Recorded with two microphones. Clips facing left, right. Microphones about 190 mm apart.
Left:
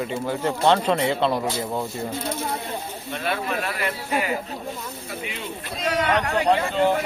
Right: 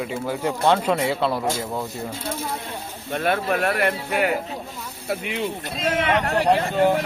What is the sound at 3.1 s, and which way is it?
Speech, 50° right (ahead or behind).